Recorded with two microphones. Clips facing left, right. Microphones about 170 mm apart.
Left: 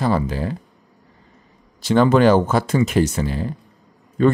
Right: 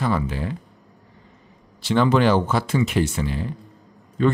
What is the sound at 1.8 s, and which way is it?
A man's voice, 45° left (ahead or behind).